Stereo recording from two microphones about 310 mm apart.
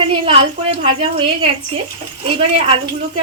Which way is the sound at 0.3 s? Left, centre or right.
Centre.